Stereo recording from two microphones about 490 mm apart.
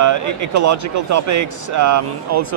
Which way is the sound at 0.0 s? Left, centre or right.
Right.